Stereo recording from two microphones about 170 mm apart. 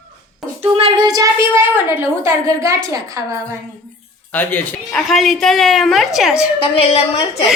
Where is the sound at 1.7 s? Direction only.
15° right (ahead or behind).